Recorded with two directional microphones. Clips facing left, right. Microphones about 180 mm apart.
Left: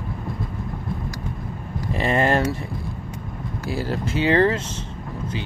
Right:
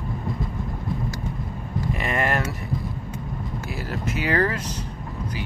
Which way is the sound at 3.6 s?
30° left (ahead or behind).